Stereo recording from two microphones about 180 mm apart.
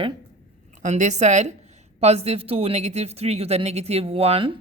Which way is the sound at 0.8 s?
40° right (ahead or behind).